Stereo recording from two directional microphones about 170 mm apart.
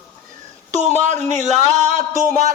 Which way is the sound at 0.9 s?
45° right (ahead or behind).